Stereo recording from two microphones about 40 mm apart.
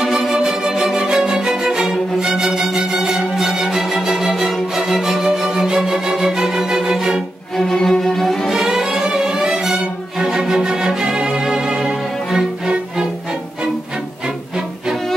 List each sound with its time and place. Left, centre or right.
0.0 s music: centre
7.5 s music: centre
8.5 s music: centre